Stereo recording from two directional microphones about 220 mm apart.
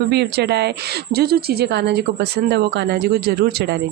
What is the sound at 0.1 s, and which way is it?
A woman's voice, 50° right (ahead or behind).